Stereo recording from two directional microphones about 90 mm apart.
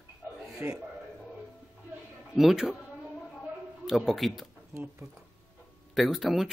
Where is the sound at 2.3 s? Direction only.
5° right (ahead or behind).